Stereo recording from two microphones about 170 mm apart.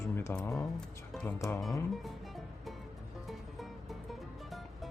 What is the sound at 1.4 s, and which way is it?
Speech, 15° left (ahead or behind).